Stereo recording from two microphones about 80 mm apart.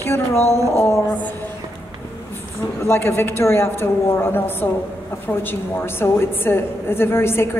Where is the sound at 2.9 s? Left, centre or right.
Left.